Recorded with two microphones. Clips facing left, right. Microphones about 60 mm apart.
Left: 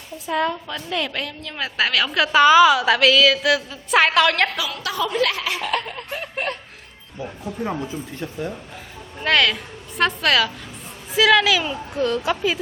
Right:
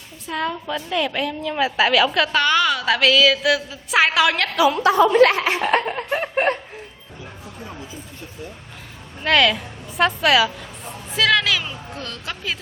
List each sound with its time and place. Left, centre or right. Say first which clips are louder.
0.3 s a woman's voice: left 2 dB; centre
4.5 s speech: right 10 dB; right
7.6 s speech: left 10 dB; left
9.2 s a woman's voice: right 2 dB; centre